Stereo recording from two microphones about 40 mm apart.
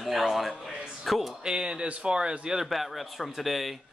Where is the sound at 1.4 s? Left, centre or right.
Right.